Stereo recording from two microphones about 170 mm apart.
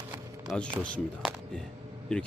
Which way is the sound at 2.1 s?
5° left (ahead or behind).